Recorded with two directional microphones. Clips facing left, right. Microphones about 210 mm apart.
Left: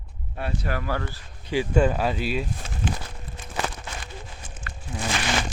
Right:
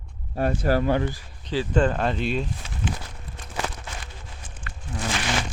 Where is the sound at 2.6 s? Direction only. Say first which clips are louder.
Left 1 dB; 45° left (ahead or behind).